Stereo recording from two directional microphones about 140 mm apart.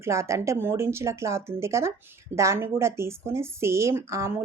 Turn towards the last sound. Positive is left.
turn(degrees=-20)  # may be behind; listen again after turning